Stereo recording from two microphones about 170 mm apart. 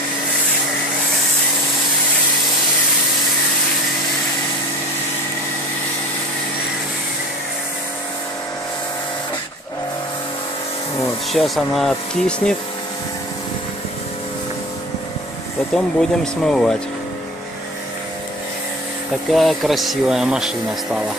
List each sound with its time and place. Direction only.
11.3 s speech: centre (ahead or behind)
15.7 s speech: 5° left (ahead or behind)
19.3 s speech: centre (ahead or behind)